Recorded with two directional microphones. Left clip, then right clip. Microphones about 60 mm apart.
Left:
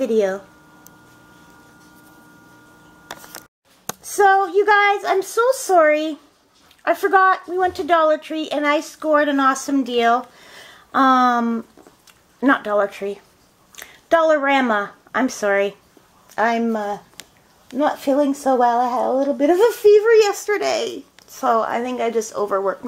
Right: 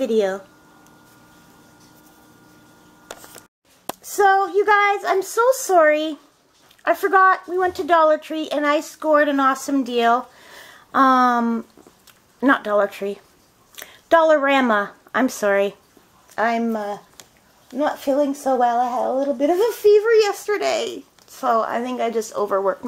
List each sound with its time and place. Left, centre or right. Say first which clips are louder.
0.0 s female singing: left 1 dB; centre
4.2 s female singing: left 2 dB; centre
5.5 s speech: even; centre
5.8 s female singing: left 1 dB; centre
6.9 s speech: even; centre; by 8.3 s right
8.3 s speech: left 1 dB; right
12.7 s speech: even; right
13.7 s a woman's voice: right 1 dB; right
16.3 s speech: left 2 dB; centre
18.8 s a woman's voice: left 1 dB; centre
19.2 s speech: left 5 dB; centre
21.9 s female singing: left 1 dB; centre
22.6 s speech: right 1 dB; right